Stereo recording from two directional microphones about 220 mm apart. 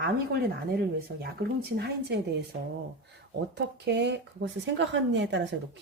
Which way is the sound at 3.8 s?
50° right (ahead or behind).